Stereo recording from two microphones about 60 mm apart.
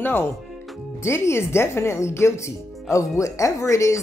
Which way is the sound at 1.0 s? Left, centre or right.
Left.